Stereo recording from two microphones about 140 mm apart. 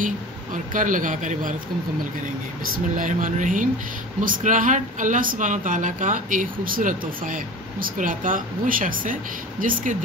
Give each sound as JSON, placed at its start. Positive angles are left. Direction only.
{"t": 0.7, "sound": "speech", "side_deg": -70}
{"t": 3.0, "sound": "speech", "side_deg": -65}